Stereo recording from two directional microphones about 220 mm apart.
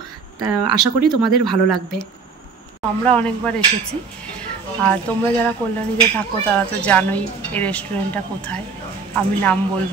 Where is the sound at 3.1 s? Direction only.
5° left (ahead or behind).